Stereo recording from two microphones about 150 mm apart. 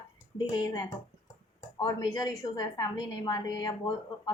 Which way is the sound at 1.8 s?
25° left (ahead or behind).